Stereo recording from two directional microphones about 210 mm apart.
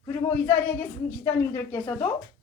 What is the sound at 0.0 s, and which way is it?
A woman's voice, 20° left (ahead or behind).